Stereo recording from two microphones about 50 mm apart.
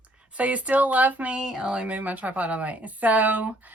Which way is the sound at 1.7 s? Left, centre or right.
Right.